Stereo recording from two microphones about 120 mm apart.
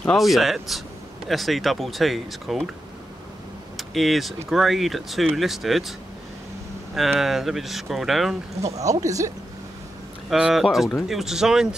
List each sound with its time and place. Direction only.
0.0 s speech: centre (ahead or behind)
3.7 s speech: centre (ahead or behind)
7.0 s speech: centre (ahead or behind)
9.0 s speech: 30° right (ahead or behind)
10.3 s speech: 5° right (ahead or behind)